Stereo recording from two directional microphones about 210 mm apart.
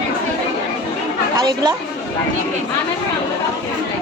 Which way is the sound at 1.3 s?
15° right (ahead or behind).